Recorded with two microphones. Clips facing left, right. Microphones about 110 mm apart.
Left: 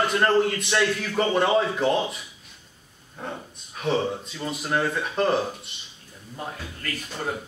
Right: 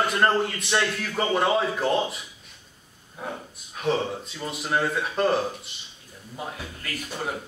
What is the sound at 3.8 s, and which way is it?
A man's voice, centre (ahead or behind).